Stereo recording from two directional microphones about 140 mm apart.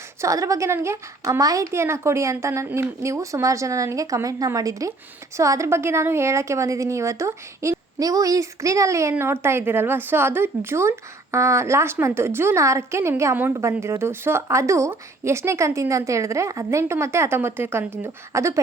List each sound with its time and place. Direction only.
0.2 s a woman's voice: 25° right (ahead or behind)